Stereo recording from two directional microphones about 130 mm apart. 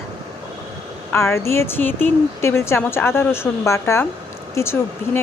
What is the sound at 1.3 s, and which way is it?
A woman's voice, 20° left (ahead or behind).